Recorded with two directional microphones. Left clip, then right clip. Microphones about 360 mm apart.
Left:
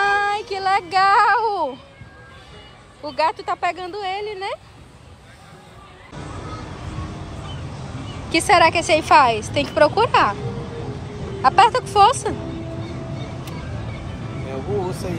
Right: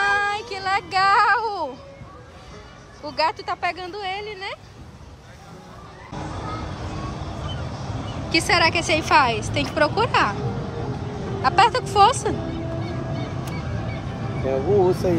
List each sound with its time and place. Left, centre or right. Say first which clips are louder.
0.0 s a sound: left 2 dB; centre
3.0 s a woman's voice: left 2 dB; centre
8.3 s a woman's voice: left 4 dB; centre
11.4 s a woman's voice: left 3 dB; centre
14.5 s speech: right 7 dB; right